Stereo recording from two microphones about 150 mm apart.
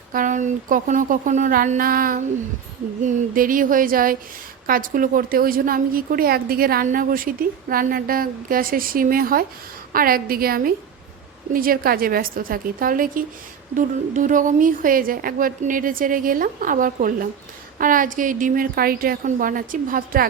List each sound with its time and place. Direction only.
0.1 s a woman's voice: 60° right (ahead or behind); by 6.8 s 80° right
6.8 s a woman's voice: 65° right (ahead or behind)